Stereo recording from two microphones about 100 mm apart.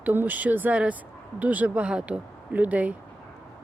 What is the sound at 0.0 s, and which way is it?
Speech, 20° right (ahead or behind).